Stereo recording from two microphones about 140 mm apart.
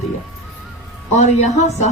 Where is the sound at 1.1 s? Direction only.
55° left (ahead or behind).